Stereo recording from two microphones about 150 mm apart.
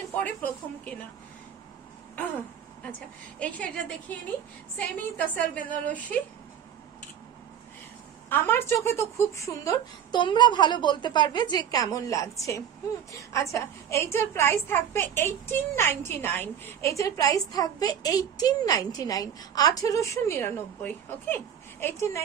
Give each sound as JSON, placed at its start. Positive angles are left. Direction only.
{"t": 0.1, "sound": "a woman's voice", "side_deg": 10}
{"t": 3.3, "sound": "a woman's voice", "side_deg": 10}
{"t": 8.3, "sound": "a woman's voice", "side_deg": 15}